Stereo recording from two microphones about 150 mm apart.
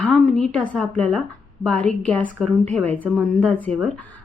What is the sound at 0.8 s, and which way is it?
A woman's voice, 5° left (ahead or behind).